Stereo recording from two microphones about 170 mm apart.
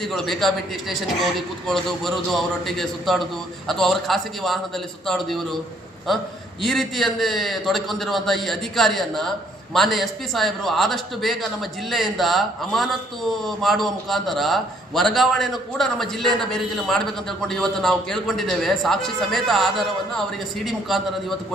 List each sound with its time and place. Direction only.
0.0 s a man's voice: centre (ahead or behind)